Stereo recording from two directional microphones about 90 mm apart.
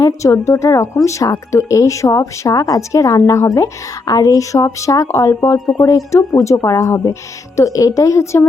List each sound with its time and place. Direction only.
0.0 s speech: 35° left (ahead or behind)
5.5 s speech: centre (ahead or behind)
6.4 s speech: 35° left (ahead or behind)